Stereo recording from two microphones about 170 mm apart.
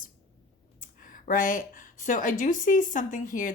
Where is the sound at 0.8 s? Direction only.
50° left (ahead or behind).